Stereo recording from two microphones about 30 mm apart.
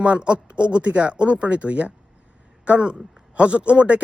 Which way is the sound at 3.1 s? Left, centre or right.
Right.